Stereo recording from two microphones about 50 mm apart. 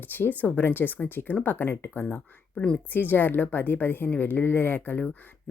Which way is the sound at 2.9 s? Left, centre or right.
Left.